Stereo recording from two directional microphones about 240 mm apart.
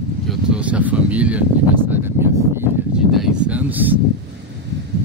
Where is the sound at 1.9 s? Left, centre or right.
Centre.